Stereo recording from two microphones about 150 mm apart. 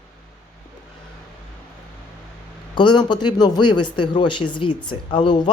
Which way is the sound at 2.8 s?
30° left (ahead or behind).